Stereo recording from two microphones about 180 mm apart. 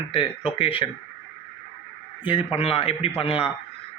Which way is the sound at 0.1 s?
30° left (ahead or behind).